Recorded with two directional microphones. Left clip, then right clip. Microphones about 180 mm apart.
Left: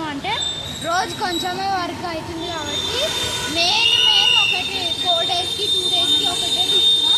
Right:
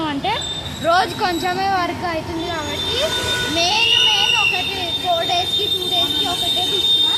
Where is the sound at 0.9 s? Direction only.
30° right (ahead or behind).